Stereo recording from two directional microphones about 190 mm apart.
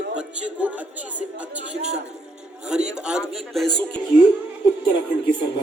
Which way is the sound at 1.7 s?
35° right (ahead or behind).